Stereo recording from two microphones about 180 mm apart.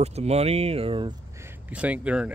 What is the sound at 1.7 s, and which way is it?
Speech, 5° right (ahead or behind).